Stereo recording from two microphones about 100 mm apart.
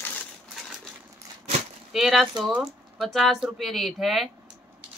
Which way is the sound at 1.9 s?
Centre (ahead or behind).